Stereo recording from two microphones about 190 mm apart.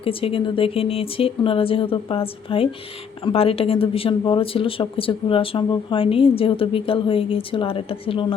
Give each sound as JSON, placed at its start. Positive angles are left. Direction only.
{"t": 0.0, "sound": "speech", "side_deg": 30}